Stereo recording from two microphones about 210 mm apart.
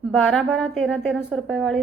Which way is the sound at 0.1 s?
Centre (ahead or behind).